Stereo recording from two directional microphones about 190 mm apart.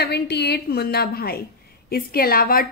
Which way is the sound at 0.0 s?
60° left (ahead or behind).